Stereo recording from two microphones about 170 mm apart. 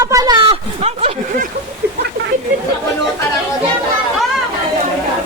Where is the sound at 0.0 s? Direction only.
20° right (ahead or behind).